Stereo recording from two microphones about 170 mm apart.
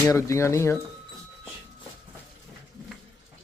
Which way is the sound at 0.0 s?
20° left (ahead or behind).